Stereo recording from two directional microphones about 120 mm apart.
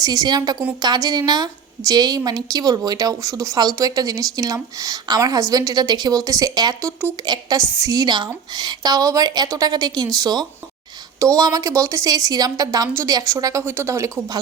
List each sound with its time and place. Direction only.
0.0 s a woman's voice: 35° right (ahead or behind)